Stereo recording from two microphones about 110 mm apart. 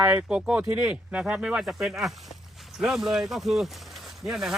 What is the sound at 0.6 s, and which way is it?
Speech, 25° right (ahead or behind).